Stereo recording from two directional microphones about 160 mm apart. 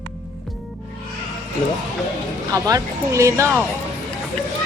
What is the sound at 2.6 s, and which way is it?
A woman's voice, 20° right (ahead or behind).